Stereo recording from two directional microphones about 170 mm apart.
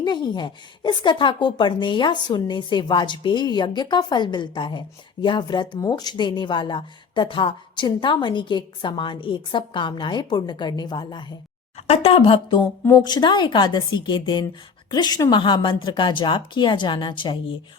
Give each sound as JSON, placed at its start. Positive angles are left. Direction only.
{"t": 0.0, "sound": "speech", "side_deg": 25}